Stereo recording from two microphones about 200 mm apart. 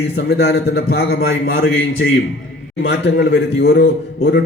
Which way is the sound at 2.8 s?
60° left (ahead or behind).